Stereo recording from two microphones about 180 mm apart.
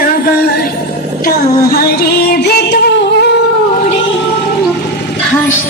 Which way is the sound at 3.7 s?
40° left (ahead or behind).